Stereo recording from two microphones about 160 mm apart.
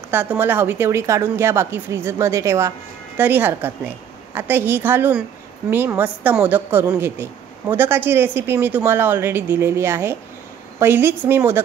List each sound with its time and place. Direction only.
0.1 s a woman's voice: 15° right (ahead or behind)